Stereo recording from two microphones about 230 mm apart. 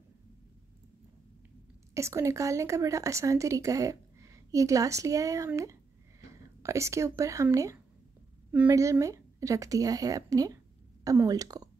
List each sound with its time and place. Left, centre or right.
2.0 s speech: centre